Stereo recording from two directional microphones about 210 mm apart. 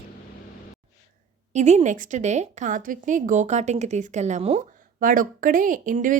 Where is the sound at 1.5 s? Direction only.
35° right (ahead or behind).